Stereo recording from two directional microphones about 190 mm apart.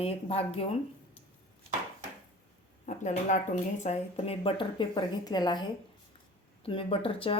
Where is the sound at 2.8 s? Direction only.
40° left (ahead or behind); by 5.6 s 20° left (ahead or behind).